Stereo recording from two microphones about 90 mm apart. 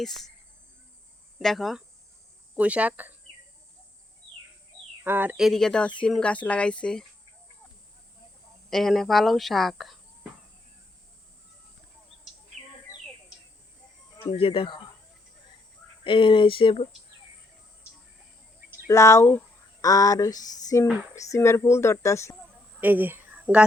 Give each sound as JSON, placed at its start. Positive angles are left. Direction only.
{"t": 1.4, "sound": "speech", "side_deg": 0}
{"t": 2.6, "sound": "speech", "side_deg": -15}
{"t": 5.0, "sound": "speech", "side_deg": -20}
{"t": 5.4, "sound": "speech", "side_deg": 5}
{"t": 8.7, "sound": "speech", "side_deg": 0}
{"t": 14.3, "sound": "speech", "side_deg": 85}
{"t": 16.0, "sound": "speech", "side_deg": 70}
{"t": 18.9, "sound": "speech", "side_deg": 35}
{"t": 22.8, "sound": "speech", "side_deg": -20}